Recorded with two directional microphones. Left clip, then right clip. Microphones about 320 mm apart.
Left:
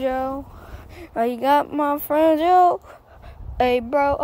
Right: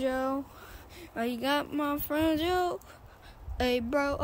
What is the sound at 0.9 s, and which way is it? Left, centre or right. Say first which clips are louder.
Speech: left 11 dB; centre.